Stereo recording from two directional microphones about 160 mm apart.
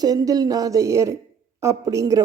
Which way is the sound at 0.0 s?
25° right (ahead or behind).